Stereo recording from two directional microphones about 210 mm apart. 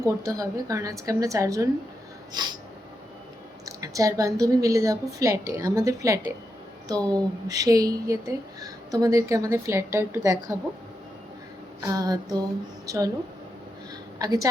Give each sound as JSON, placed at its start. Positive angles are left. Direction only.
{"t": 0.0, "sound": "speech", "side_deg": -15}
{"t": 2.3, "sound": "snort", "side_deg": -20}
{"t": 3.7, "sound": "speech", "side_deg": -15}
{"t": 11.8, "sound": "speech", "side_deg": -15}
{"t": 14.2, "sound": "a woman's voice", "side_deg": -15}